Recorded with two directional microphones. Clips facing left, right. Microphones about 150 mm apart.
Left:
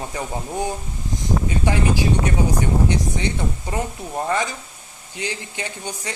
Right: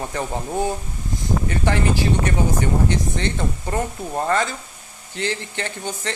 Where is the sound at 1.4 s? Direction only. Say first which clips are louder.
Right 1 dB; 15° left (ahead or behind).